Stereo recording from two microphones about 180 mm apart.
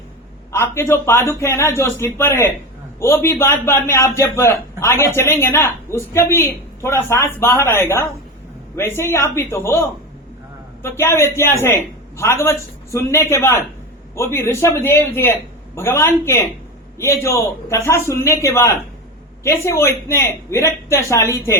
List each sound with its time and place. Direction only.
0.5 s a man's voice: 15° left (ahead or behind)